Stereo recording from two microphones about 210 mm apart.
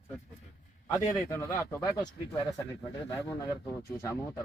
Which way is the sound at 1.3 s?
15° left (ahead or behind).